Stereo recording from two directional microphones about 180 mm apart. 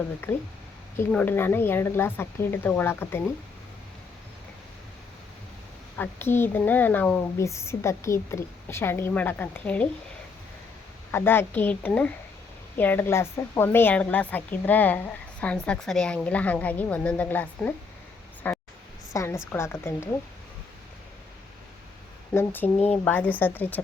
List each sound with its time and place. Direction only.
0.2 s a woman's voice: 10° left (ahead or behind)
6.0 s a woman's voice: 10° left (ahead or behind)
11.1 s a woman's voice: 10° left (ahead or behind)
22.4 s a woman's voice: 10° left (ahead or behind)